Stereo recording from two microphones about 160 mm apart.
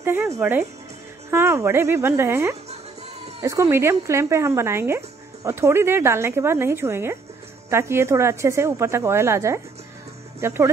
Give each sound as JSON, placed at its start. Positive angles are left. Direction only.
{"t": 0.0, "sound": "speech", "side_deg": -15}